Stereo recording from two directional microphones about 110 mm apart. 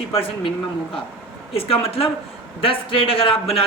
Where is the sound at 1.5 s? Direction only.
60° left (ahead or behind).